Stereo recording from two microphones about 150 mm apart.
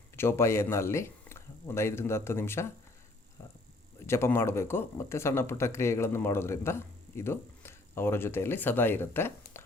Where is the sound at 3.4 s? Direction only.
15° left (ahead or behind).